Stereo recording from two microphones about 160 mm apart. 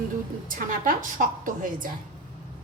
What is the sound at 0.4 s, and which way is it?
A woman's voice, 55° right (ahead or behind).